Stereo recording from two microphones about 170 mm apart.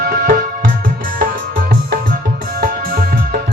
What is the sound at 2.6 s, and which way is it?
Music, 60° right (ahead or behind).